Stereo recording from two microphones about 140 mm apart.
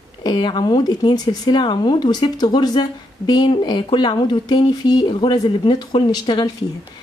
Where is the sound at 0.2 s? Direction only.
30° left (ahead or behind).